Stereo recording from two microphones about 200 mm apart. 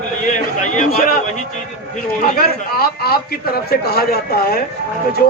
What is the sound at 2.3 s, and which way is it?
Speech, 50° left (ahead or behind).